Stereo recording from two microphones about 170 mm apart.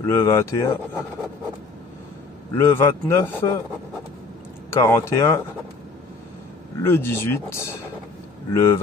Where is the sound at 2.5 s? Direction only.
15° left (ahead or behind).